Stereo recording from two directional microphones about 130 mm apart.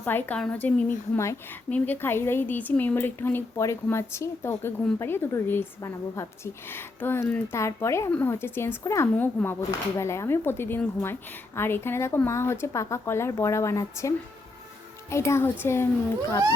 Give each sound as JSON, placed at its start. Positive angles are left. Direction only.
{"t": 0.0, "sound": "speech", "side_deg": 15}
{"t": 15.1, "sound": "speech", "side_deg": 20}